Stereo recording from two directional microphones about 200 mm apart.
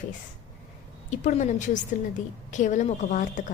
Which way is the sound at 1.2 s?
35° left (ahead or behind).